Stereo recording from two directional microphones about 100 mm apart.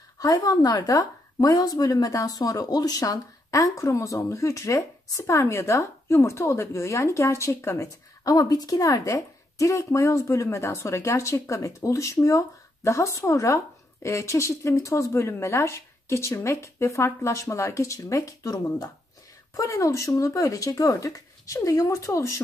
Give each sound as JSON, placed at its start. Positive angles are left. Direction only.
{"t": 0.2, "sound": "a woman's voice", "side_deg": 35}